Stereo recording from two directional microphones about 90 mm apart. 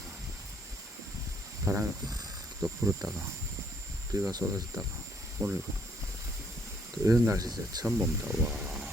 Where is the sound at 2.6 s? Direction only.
35° right (ahead or behind).